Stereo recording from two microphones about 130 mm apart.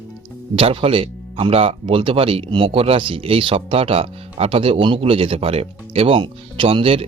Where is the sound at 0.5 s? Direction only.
45° right (ahead or behind).